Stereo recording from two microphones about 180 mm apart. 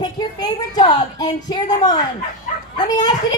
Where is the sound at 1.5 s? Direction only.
20° left (ahead or behind).